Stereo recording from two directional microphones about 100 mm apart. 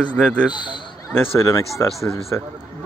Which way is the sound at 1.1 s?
30° left (ahead or behind).